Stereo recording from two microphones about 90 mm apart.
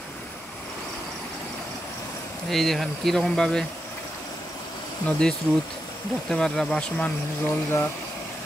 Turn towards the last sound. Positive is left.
turn(degrees=30)  # may be behind; listen again after turning